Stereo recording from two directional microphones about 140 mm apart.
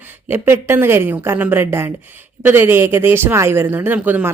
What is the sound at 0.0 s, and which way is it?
A woman's voice, 15° right (ahead or behind).